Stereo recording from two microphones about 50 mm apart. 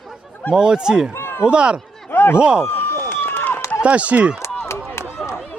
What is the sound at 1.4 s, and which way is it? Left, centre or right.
Speech, centre.